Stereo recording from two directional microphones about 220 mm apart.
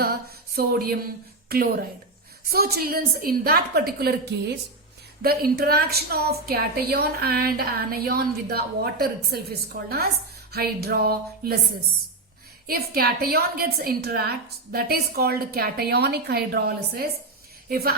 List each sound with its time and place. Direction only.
0.0 s a woman's voice: 45° right (ahead or behind)
12.6 s a woman's voice: 40° right (ahead or behind)
17.7 s a sound: 45° right (ahead or behind)